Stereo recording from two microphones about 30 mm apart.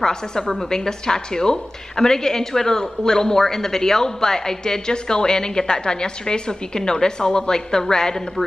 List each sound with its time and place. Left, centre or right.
0.0 s a woman's voice: left